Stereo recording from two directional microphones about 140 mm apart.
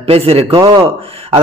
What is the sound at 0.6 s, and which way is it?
Speech, 30° right (ahead or behind).